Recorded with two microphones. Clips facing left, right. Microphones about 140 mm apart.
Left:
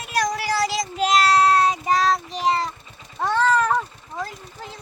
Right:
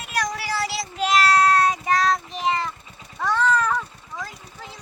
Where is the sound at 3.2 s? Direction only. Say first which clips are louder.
Left 2 dB; 30° left (ahead or behind).